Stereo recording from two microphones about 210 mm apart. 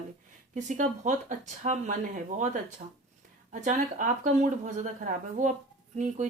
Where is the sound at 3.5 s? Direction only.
35° right (ahead or behind).